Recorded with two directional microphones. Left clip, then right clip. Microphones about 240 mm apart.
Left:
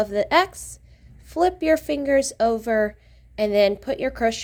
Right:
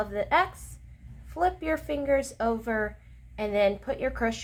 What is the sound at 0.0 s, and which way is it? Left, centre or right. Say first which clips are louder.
A woman's voice: left 6 dB; left.